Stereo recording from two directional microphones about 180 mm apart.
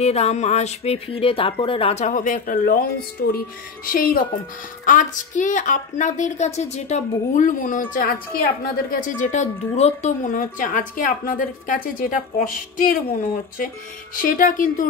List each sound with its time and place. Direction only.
0.0 s a woman's voice: 35° left (ahead or behind)
14.1 s a woman's voice: 50° left (ahead or behind)